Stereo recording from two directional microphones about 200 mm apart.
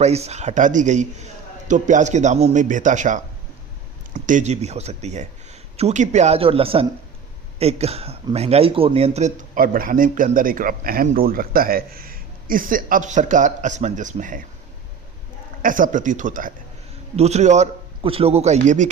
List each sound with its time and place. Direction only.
0.0 s speech: 35° right (ahead or behind)
15.6 s speech: 40° right (ahead or behind)